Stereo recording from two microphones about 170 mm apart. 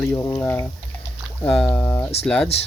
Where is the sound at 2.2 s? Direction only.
5° left (ahead or behind).